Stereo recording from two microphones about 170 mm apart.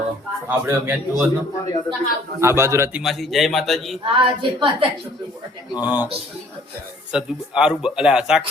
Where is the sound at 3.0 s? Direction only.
Centre (ahead or behind).